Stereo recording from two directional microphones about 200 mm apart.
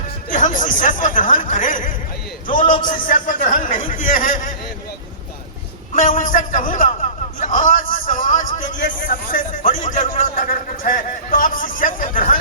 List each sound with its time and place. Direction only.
0.3 s a man's voice: 40° left (ahead or behind)
5.9 s a man's voice: 40° left (ahead or behind)